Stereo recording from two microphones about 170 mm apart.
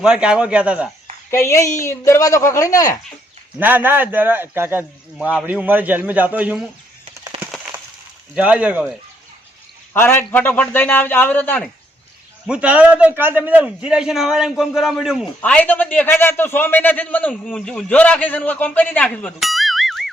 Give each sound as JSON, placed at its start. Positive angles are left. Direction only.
{"t": 0.0, "sound": "a man's voice", "side_deg": -5}
{"t": 1.3, "sound": "a man's voice", "side_deg": 15}
{"t": 3.6, "sound": "a man's voice", "side_deg": -10}
{"t": 7.3, "sound": "splinter", "side_deg": -35}
{"t": 8.4, "sound": "a man's voice", "side_deg": -10}
{"t": 9.9, "sound": "a man's voice", "side_deg": 10}
{"t": 12.5, "sound": "a man's voice", "side_deg": -5}
{"t": 15.4, "sound": "a man's voice", "side_deg": 10}